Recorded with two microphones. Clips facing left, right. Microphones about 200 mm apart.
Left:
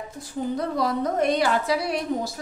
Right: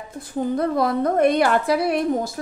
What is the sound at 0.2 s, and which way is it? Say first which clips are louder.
A woman's voice: right 5 dB; 55° right (ahead or behind).